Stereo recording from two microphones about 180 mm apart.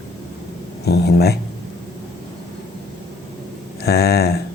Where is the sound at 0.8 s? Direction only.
65° left (ahead or behind).